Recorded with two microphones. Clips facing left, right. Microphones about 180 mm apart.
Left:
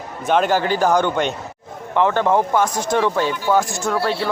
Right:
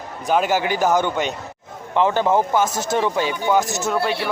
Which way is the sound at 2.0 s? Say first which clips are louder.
Left 1 dB; 25° right (ahead or behind).